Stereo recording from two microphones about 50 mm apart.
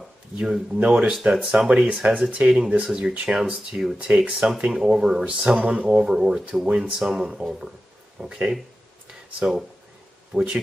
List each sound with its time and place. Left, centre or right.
0.4 s speech: centre
2.4 s speech: centre
5.2 s speech: right
5.9 s speech: centre
9.4 s speech: right
10.3 s speech: right